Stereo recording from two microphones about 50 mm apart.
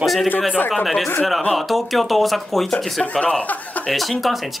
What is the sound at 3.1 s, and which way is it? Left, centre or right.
Speech, left.